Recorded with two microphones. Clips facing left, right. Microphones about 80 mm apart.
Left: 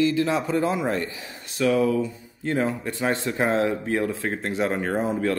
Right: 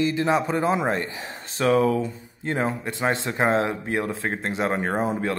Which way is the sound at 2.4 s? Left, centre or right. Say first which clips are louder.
Left 1 dB; right.